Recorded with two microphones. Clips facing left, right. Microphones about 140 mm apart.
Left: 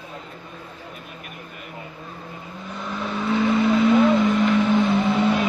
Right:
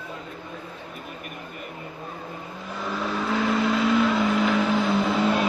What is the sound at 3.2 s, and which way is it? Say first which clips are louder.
Vehicle: left 5 dB; centre (ahead or behind).